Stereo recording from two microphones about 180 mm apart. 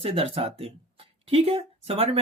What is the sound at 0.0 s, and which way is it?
Speech, 30° right (ahead or behind).